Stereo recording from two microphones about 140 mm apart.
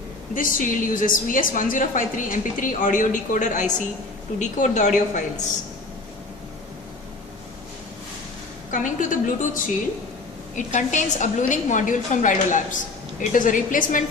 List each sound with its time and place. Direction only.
0.3 s a woman's voice: 70° left (ahead or behind)
8.7 s a woman's voice: 65° left (ahead or behind)